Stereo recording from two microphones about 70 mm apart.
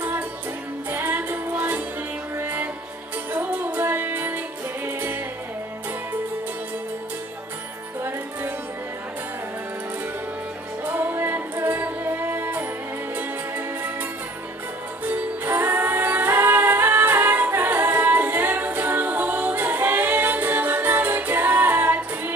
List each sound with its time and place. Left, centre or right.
0.9 s music: right
10.9 s music: right
15.0 s music: right